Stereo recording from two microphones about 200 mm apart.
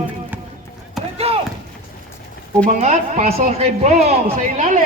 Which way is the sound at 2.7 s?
35° right (ahead or behind).